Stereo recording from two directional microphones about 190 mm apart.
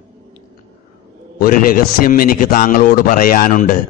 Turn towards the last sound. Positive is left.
turn(degrees=45)  # may be behind; listen again after turning